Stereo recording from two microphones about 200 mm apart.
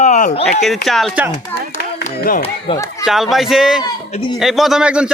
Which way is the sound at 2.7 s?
25° left (ahead or behind).